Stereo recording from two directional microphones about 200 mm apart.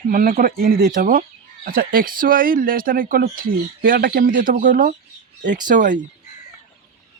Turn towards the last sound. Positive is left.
turn(degrees=-40)  # may be behind; listen again after turning